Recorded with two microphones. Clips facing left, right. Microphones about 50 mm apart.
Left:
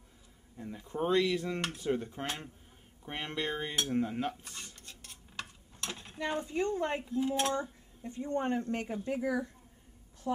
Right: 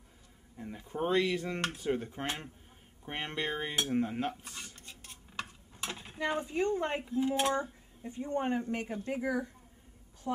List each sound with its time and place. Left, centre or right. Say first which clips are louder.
0.6 s speech: even; centre
8.1 s speech: even; right
10.3 s a woman's voice: left 1 dB; right